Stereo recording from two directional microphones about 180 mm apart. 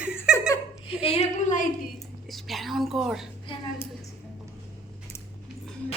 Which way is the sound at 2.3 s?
Centre (ahead or behind).